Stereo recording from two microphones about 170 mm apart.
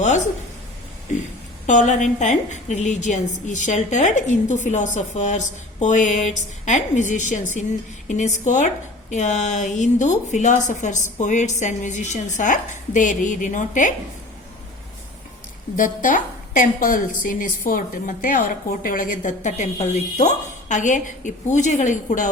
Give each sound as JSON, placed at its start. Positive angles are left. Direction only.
{"t": 1.6, "sound": "a woman's voice", "side_deg": 45}
{"t": 15.7, "sound": "a woman's voice", "side_deg": 50}